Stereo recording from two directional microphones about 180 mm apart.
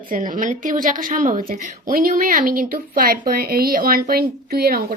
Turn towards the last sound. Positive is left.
turn(degrees=-55)  # may be behind; listen again after turning